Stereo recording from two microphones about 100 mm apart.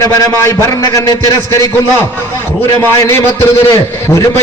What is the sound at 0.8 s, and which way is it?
Speech, 40° left (ahead or behind).